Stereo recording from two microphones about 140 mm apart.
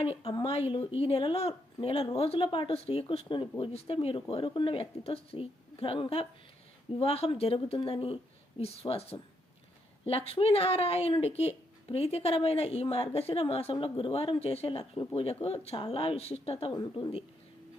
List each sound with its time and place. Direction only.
0.0 s a woman's voice: 45° left (ahead or behind)